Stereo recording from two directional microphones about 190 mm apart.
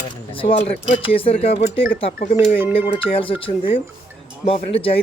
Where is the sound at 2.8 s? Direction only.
30° left (ahead or behind).